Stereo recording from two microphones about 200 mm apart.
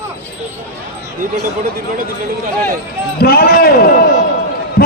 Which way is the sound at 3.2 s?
50° left (ahead or behind).